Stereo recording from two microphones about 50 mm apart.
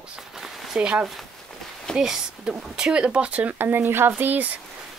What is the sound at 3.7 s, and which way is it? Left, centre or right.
Speech, right.